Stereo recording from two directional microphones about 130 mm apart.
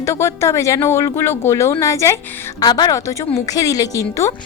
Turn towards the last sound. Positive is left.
turn(degrees=25)  # may be behind; listen again after turning